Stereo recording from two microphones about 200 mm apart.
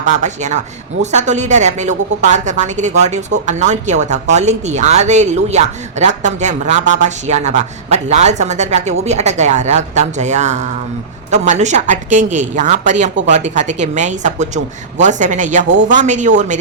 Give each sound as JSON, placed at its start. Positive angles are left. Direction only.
{"t": 0.0, "sound": "a woman's voice", "side_deg": -35}